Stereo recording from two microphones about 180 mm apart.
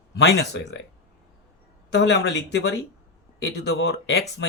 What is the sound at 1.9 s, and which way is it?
Speech, 70° left (ahead or behind).